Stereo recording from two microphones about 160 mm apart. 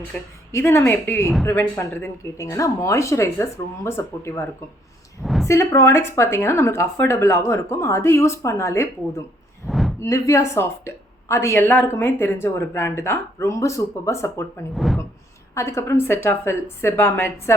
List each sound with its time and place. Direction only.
0.1 s a woman's voice: 10° left (ahead or behind)
5.2 s a woman's voice: centre (ahead or behind)
5.5 s a woman's voice: 15° left (ahead or behind)
9.6 s a sound: centre (ahead or behind)
10.0 s a woman's voice: 20° left (ahead or behind)
14.8 s speech: centre (ahead or behind)
15.5 s a woman's voice: 15° left (ahead or behind)